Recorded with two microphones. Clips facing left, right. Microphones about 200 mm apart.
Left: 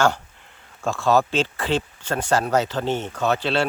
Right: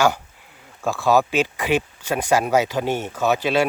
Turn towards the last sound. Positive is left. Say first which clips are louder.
# right 2 dB
turn(degrees=-10)  # may be behind; listen again after turning